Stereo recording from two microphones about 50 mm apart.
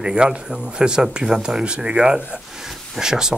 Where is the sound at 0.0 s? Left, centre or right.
Centre.